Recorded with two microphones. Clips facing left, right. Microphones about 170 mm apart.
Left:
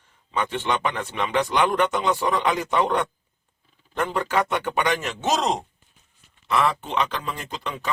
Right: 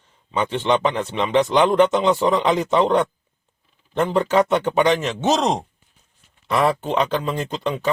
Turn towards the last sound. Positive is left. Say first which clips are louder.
# right 8 dB
turn(degrees=-30)  # may be behind; listen again after turning